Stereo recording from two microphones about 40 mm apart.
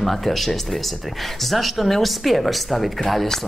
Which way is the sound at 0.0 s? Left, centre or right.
Centre.